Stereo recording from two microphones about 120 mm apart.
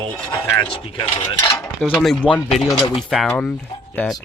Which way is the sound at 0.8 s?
50° left (ahead or behind).